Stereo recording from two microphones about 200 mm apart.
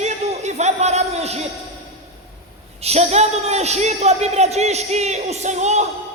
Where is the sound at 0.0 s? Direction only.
30° right (ahead or behind).